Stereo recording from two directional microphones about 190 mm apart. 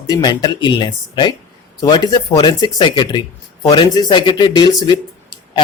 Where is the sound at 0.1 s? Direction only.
20° left (ahead or behind).